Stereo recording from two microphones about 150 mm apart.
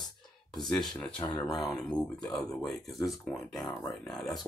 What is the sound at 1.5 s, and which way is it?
Speech, centre (ahead or behind).